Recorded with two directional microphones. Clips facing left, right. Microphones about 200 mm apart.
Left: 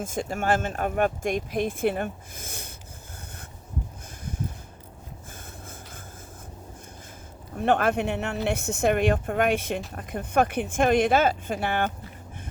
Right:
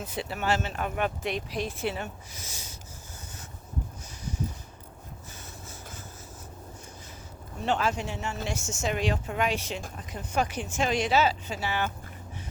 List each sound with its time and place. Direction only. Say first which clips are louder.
0.0 s speech: left 4 dB; 45° left (ahead or behind)
4.3 s a sound: even; 55° left (ahead or behind)
7.5 s speech: left 5 dB; 55° left (ahead or behind)